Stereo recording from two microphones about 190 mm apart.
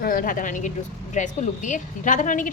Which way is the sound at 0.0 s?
50° left (ahead or behind).